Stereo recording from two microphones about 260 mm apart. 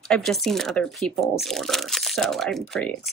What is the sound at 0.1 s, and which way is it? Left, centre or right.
Speech, centre.